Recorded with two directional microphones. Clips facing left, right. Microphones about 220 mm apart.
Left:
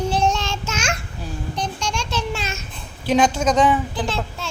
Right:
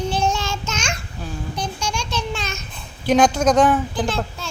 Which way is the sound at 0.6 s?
5° left (ahead or behind).